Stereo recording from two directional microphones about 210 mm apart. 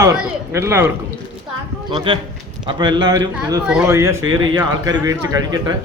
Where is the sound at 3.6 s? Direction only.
5° right (ahead or behind).